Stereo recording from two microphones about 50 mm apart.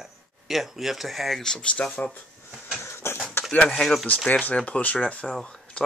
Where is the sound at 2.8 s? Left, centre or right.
Left.